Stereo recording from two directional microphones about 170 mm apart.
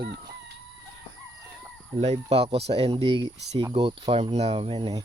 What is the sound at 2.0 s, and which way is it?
Speech, 40° right (ahead or behind).